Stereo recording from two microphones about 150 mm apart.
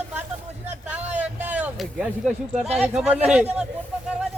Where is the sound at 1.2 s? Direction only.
10° right (ahead or behind).